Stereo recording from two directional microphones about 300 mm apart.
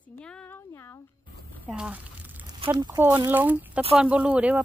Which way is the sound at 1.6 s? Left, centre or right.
Centre.